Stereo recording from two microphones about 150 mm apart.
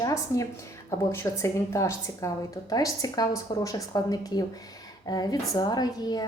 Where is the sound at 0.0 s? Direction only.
20° left (ahead or behind).